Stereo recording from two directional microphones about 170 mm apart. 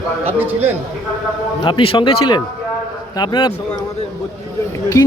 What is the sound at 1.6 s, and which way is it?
Speech, 30° left (ahead or behind).